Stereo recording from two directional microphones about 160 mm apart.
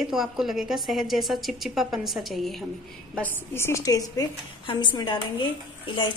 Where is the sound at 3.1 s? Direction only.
10° left (ahead or behind).